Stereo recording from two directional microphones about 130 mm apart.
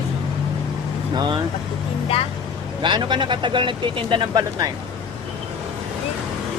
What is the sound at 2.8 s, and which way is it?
Speech, 35° right (ahead or behind).